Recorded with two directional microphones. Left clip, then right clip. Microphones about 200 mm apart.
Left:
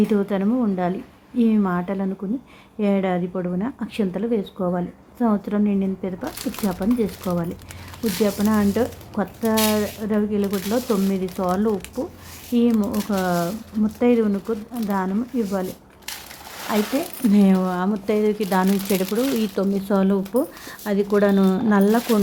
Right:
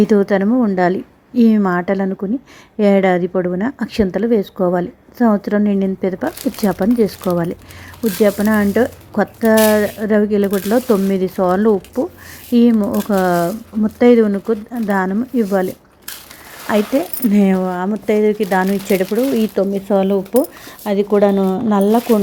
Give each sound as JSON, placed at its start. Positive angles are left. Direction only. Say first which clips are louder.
{"t": 0.1, "sound": "speech", "louder": "right 8 dB", "side_deg": -20}
{"t": 16.7, "sound": "speech", "louder": "right 7 dB", "side_deg": -25}